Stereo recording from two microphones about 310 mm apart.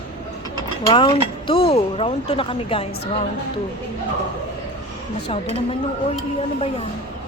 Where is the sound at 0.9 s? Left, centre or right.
Centre.